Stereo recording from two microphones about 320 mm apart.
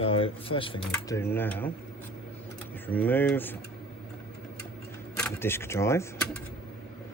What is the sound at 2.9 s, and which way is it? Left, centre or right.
Speech, centre.